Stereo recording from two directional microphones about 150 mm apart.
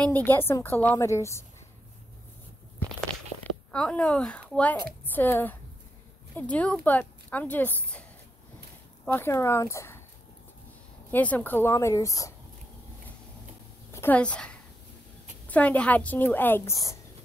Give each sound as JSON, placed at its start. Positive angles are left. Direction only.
{"t": 0.0, "sound": "a woman's voice", "side_deg": 10}
{"t": 3.3, "sound": "a sound", "side_deg": 35}
{"t": 3.7, "sound": "a woman's voice", "side_deg": 5}
{"t": 9.0, "sound": "a woman's voice", "side_deg": 15}
{"t": 11.1, "sound": "a woman's voice", "side_deg": 10}
{"t": 13.9, "sound": "a woman's voice", "side_deg": 10}